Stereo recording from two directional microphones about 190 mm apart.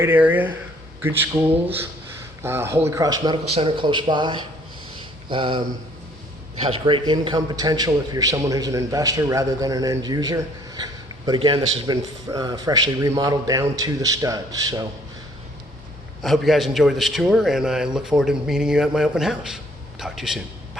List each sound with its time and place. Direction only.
0.0 s a man's voice: 10° right (ahead or behind)
16.2 s a man's voice: centre (ahead or behind)